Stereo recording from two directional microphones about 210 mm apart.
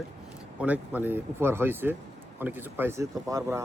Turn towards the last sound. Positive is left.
turn(degrees=-15)  # may be behind; listen again after turning